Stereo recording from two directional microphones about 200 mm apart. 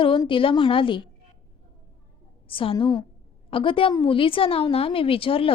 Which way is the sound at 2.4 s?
25° left (ahead or behind).